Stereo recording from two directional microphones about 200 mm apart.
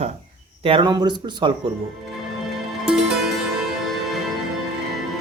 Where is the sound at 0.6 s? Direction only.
25° right (ahead or behind).